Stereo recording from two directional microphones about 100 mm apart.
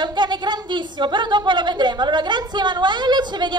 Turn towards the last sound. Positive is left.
turn(degrees=-50)  # may be behind; listen again after turning